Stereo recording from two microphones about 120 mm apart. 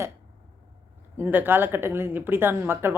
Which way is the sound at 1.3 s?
15° right (ahead or behind).